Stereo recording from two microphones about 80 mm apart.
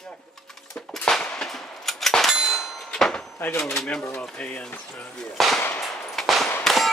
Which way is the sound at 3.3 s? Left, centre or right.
Left.